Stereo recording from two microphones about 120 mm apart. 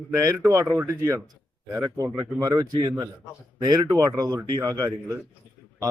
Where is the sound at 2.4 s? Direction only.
30° right (ahead or behind).